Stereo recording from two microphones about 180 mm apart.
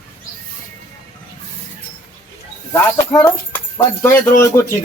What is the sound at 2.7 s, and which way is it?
Speech, 20° left (ahead or behind).